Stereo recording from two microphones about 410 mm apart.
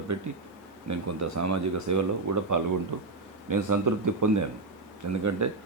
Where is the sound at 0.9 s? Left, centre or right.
Right.